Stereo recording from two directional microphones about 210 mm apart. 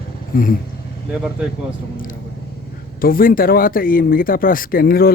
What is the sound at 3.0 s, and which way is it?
Speech, 45° left (ahead or behind).